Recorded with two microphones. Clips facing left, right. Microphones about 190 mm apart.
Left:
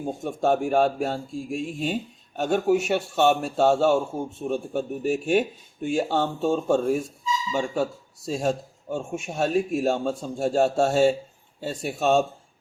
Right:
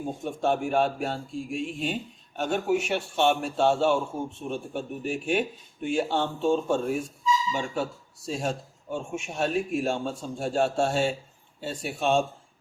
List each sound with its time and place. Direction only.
0.3 s speech: 40° left (ahead or behind)